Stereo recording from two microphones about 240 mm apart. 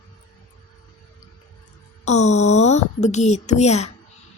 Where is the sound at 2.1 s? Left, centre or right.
Left.